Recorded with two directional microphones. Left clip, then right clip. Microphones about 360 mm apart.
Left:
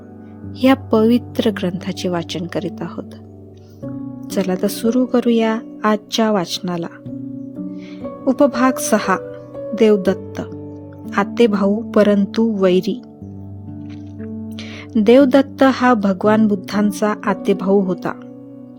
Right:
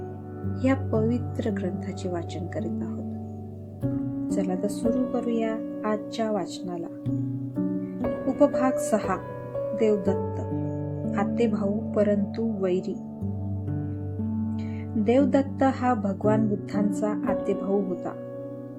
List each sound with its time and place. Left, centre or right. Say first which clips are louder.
0.6 s speech: left 11 dB; left
4.4 s speech: left 11 dB; left
8.4 s speech: left 6 dB; left
14.5 s speech: left 9 dB; left